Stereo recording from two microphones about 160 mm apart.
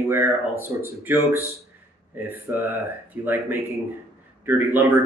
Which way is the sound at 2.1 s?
10° right (ahead or behind).